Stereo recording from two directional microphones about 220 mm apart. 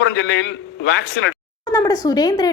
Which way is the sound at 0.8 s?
60° left (ahead or behind).